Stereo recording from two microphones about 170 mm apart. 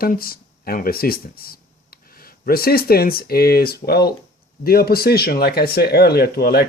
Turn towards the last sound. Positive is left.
turn(degrees=65)  # may be behind; listen again after turning